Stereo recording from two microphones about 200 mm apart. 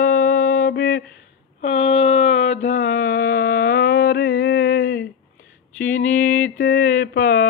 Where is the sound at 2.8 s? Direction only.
45° left (ahead or behind).